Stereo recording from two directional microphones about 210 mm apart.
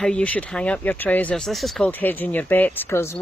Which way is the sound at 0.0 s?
5° left (ahead or behind).